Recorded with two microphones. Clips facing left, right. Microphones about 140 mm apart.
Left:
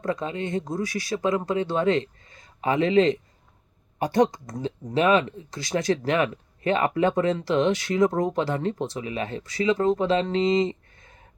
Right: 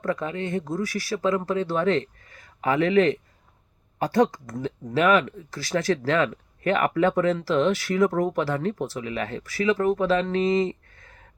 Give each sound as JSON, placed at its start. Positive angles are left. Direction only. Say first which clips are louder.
{"t": 0.0, "sound": "speech", "louder": "even", "side_deg": 20}